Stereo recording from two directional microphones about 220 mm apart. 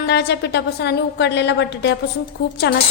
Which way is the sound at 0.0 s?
50° left (ahead or behind).